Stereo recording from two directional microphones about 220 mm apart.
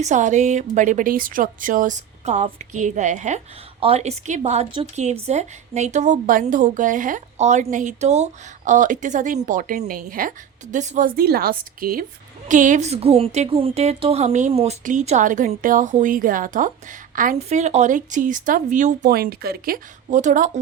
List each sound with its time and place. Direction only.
0.0 s a woman's voice: 35° right (ahead or behind)